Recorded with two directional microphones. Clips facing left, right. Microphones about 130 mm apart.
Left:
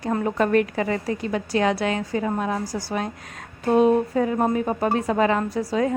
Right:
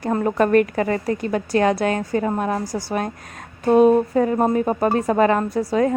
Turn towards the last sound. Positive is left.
turn(degrees=-50)  # may be behind; listen again after turning